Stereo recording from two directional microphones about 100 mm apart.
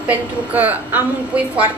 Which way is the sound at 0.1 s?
15° right (ahead or behind).